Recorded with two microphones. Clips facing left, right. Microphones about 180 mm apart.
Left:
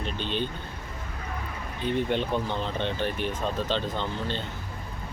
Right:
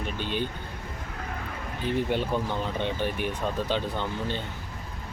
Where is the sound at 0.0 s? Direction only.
10° right (ahead or behind).